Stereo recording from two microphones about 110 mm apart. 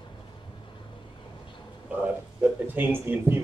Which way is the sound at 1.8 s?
10° right (ahead or behind).